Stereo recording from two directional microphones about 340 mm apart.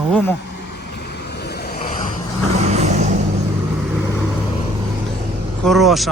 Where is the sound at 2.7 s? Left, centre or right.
Centre.